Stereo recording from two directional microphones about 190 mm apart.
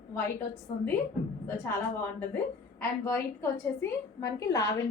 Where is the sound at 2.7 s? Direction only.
15° left (ahead or behind).